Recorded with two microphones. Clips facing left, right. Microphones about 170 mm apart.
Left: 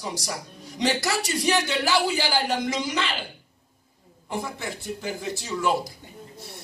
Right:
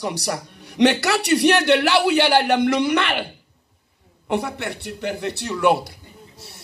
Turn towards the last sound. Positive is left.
turn(degrees=-65)  # may be behind; listen again after turning